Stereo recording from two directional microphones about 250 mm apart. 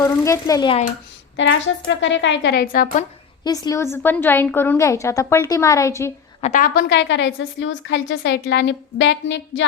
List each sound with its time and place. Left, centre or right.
0.0 s a woman's voice: centre
1.4 s a woman's voice: left
3.4 s a woman's voice: centre
6.4 s a woman's voice: left